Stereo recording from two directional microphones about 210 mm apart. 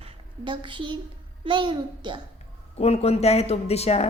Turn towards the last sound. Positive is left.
turn(degrees=30)  # may be behind; listen again after turning